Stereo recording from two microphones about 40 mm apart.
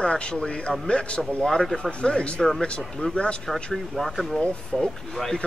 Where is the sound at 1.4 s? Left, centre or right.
Centre.